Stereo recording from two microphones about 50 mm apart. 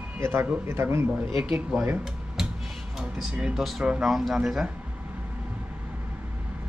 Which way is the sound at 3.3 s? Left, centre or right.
Centre.